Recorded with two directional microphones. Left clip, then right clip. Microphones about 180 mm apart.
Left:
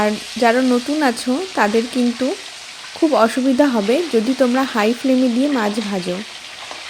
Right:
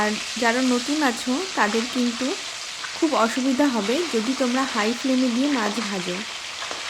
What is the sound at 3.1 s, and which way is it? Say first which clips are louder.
Frying: left 7 dB; 25° left (ahead or behind).